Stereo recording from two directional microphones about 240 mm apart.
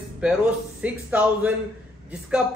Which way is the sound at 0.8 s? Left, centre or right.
Centre.